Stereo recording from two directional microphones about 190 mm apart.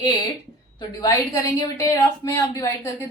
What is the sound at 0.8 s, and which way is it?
A woman's voice, 20° left (ahead or behind).